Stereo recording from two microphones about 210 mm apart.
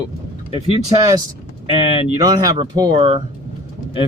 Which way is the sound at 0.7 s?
20° right (ahead or behind).